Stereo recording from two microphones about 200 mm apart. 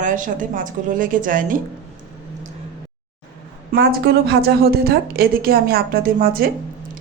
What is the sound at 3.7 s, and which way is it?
A woman's voice, 55° right (ahead or behind).